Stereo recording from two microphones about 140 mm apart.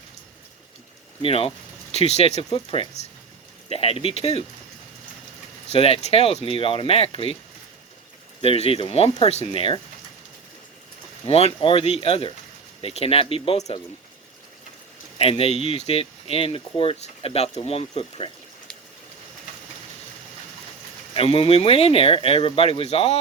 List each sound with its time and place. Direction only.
1.2 s speech: 45° left (ahead or behind)
5.6 s speech: 45° left (ahead or behind)
8.4 s speech: 45° left (ahead or behind)
11.3 s speech: 45° left (ahead or behind)
15.2 s speech: 45° left (ahead or behind)
21.1 s speech: 45° left (ahead or behind)